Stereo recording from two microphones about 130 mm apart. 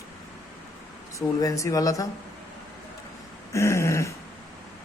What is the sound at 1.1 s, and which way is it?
Speech, 25° left (ahead or behind).